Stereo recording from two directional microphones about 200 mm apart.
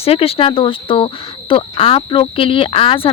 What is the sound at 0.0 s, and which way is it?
Speech, 30° left (ahead or behind).